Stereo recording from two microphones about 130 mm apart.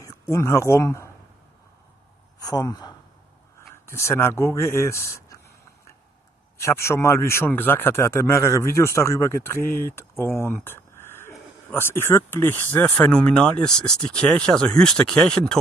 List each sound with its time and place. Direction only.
0.0 s speech: 25° left (ahead or behind)
2.4 s speech: 30° left (ahead or behind)
6.6 s speech: 20° left (ahead or behind)